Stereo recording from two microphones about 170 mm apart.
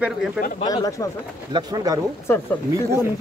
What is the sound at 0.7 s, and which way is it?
Speech, 20° left (ahead or behind).